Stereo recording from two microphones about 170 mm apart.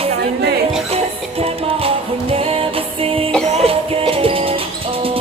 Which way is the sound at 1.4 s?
35° right (ahead or behind).